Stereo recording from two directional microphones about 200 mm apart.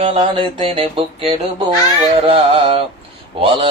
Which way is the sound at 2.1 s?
30° right (ahead or behind).